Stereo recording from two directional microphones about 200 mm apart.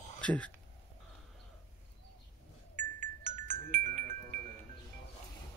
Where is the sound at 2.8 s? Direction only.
40° right (ahead or behind).